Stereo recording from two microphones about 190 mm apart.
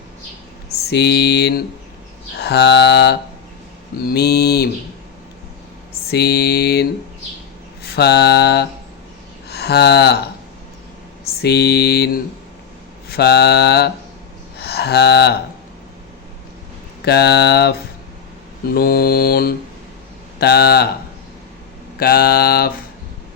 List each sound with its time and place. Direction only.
0.9 s speech: 60° left (ahead or behind)
6.1 s speech: 60° left (ahead or behind)
7.9 s speech: 60° left (ahead or behind)
9.5 s a sound: 60° left (ahead or behind)
11.4 s speech: 60° left (ahead or behind)
14.6 s a sound: 55° left (ahead or behind)
17.1 s speech: 60° left (ahead or behind)
18.7 s mantra: 50° left (ahead or behind)
20.4 s speech: 55° left (ahead or behind)
21.9 s mantra: 50° left (ahead or behind)